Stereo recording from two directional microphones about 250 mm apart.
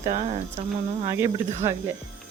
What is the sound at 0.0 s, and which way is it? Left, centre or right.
Speech, right.